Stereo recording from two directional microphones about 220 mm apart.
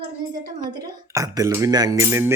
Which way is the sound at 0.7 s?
15° right (ahead or behind).